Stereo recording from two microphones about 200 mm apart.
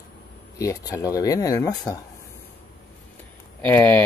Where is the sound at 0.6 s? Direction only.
15° left (ahead or behind).